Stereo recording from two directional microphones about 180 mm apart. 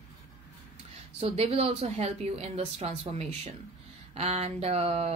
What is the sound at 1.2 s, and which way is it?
Speech, 35° right (ahead or behind).